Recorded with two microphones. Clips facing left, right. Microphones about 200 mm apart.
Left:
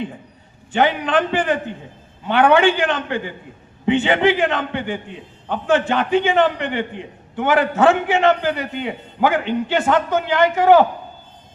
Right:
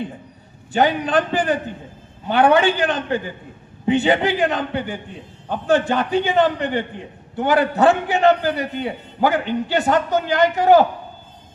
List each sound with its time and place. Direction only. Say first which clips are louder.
0.7 s a man's voice: even; 40° right (ahead or behind)